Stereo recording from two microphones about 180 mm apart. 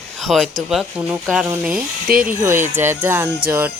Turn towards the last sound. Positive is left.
turn(degrees=-15)  # may be behind; listen again after turning